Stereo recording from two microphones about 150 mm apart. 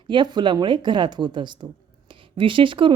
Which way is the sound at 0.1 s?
30° right (ahead or behind).